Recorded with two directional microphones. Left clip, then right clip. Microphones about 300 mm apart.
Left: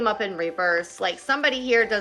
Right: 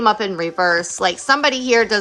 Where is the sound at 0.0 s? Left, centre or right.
Centre.